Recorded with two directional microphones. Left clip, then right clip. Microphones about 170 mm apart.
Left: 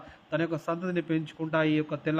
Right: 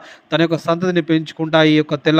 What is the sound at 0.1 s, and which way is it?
A man's voice, 35° right (ahead or behind).